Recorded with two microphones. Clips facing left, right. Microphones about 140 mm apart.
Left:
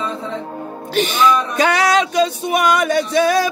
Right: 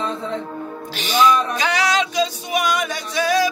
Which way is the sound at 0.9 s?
55° left (ahead or behind).